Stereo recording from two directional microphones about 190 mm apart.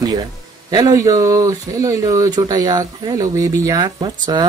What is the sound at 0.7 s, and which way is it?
Speech, 20° right (ahead or behind).